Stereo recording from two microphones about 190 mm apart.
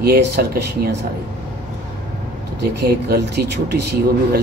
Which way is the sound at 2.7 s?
55° right (ahead or behind).